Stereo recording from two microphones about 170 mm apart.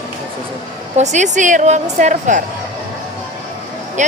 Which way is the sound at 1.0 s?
45° right (ahead or behind).